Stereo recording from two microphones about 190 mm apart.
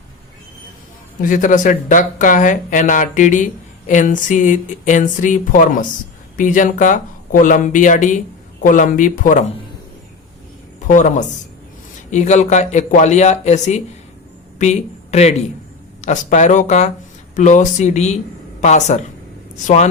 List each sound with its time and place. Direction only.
1.2 s speech: 45° left (ahead or behind)
10.8 s speech: 40° left (ahead or behind)